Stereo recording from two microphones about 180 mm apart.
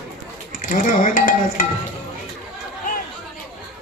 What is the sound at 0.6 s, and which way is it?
Speech, 50° left (ahead or behind).